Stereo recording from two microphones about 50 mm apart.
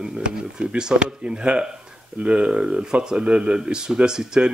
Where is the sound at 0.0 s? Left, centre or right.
Centre.